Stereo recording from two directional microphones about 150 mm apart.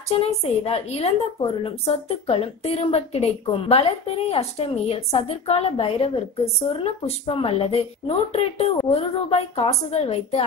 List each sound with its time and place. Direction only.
0.1 s a woman's voice: 40° left (ahead or behind)